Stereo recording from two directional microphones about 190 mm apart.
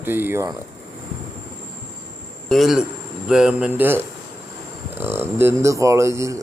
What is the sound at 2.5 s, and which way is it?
A man's voice, centre (ahead or behind).